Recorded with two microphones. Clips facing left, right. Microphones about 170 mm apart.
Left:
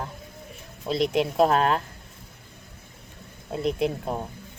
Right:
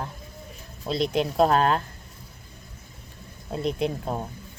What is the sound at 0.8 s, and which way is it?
Speech, 30° right (ahead or behind).